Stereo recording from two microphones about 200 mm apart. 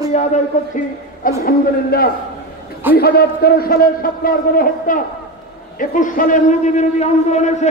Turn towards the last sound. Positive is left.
turn(degrees=35)  # may be behind; listen again after turning